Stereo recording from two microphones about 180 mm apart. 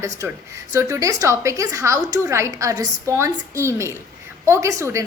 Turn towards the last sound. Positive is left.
turn(degrees=-15)  # may be behind; listen again after turning